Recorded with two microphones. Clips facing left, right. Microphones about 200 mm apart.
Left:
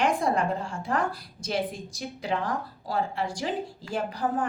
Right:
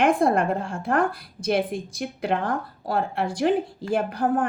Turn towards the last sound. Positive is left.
turn(degrees=-55)  # may be behind; listen again after turning